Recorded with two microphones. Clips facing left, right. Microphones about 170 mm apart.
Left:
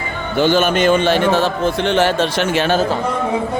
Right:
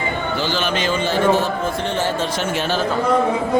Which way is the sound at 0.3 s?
55° left (ahead or behind).